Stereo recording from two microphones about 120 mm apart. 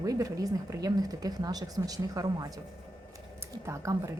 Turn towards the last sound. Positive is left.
turn(degrees=-25)  # may be behind; listen again after turning